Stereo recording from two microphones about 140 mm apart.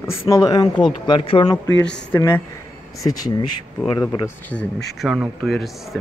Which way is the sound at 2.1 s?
20° left (ahead or behind).